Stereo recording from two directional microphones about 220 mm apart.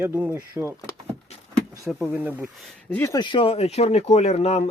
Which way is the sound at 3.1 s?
20° left (ahead or behind).